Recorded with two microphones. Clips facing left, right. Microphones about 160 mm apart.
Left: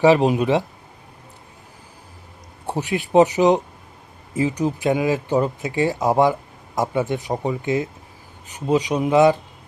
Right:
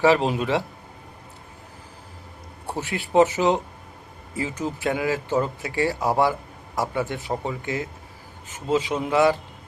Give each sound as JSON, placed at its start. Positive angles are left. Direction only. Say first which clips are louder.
{"t": 0.0, "sound": "speech", "louder": "left 4 dB", "side_deg": 20}
{"t": 2.6, "sound": "speech", "louder": "left 5 dB", "side_deg": 15}